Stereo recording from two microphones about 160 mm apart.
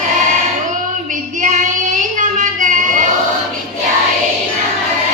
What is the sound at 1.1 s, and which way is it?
Child singing, 50° right (ahead or behind).